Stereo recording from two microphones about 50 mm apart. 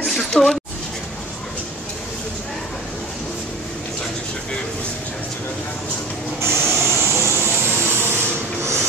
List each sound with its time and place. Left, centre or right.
0.3 s speech: centre
6.4 s spray: right
7.8 s rub: right